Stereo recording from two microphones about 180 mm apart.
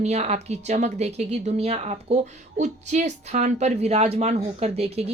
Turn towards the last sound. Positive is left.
turn(degrees=-35)  # may be behind; listen again after turning